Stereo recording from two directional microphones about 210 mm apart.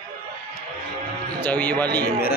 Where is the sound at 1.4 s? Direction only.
10° left (ahead or behind).